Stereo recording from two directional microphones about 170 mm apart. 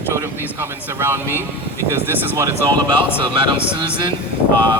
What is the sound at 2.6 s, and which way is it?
Speech, 30° right (ahead or behind).